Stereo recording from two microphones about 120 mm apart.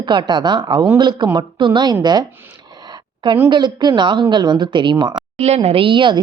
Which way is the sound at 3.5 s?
40° right (ahead or behind).